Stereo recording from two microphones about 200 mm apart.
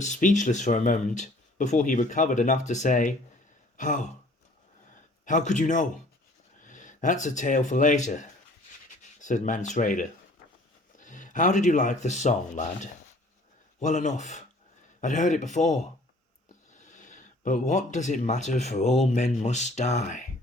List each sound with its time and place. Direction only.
0.0 s speech: 40° left (ahead or behind)
3.8 s a sound: 40° left (ahead or behind)
5.2 s speech: 40° left (ahead or behind)